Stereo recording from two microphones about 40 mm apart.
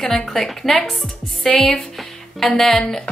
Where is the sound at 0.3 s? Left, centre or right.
Centre.